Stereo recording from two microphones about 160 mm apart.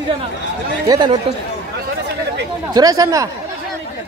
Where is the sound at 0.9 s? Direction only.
30° right (ahead or behind).